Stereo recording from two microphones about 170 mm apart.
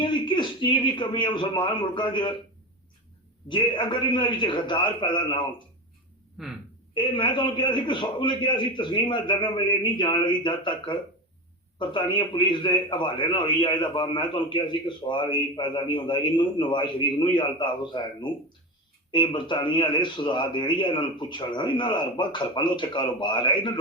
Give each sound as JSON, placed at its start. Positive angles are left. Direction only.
{"t": 0.0, "sound": "a man's voice", "side_deg": 30}
{"t": 3.5, "sound": "a man's voice", "side_deg": 30}
{"t": 6.4, "sound": "speech", "side_deg": 0}
{"t": 6.9, "sound": "a man's voice", "side_deg": 30}